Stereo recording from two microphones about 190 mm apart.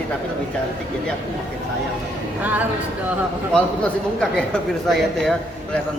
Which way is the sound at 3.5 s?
5° left (ahead or behind).